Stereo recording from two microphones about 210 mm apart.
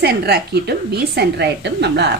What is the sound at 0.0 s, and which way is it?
A woman's voice, 50° right (ahead or behind).